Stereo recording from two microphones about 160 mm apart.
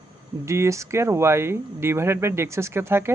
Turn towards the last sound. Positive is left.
turn(degrees=-15)  # may be behind; listen again after turning